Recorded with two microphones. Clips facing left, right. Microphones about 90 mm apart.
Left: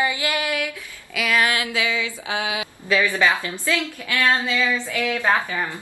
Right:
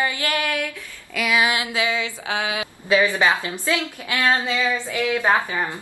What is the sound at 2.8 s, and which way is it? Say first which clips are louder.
A woman's voice: right 1 dB; 20° right (ahead or behind).